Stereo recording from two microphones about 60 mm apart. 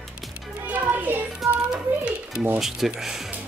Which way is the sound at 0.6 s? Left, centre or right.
Right.